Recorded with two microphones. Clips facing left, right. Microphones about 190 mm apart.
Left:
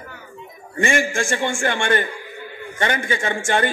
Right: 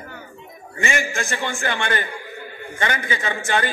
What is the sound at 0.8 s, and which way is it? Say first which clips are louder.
Speech: left 4 dB; 50° left (ahead or behind).